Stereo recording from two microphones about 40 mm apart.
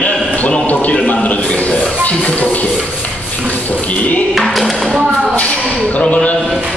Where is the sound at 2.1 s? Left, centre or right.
Left.